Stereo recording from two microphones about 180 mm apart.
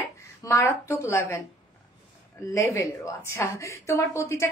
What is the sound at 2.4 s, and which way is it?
A woman's voice, 15° left (ahead or behind).